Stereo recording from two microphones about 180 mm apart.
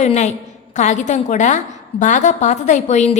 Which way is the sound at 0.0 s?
40° left (ahead or behind).